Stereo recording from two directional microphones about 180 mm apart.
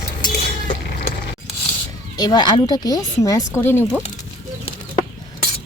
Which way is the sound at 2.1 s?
25° left (ahead or behind).